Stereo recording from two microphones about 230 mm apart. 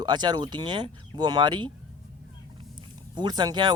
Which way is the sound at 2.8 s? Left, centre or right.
Centre.